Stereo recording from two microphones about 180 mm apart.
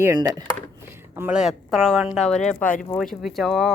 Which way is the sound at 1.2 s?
5° right (ahead or behind).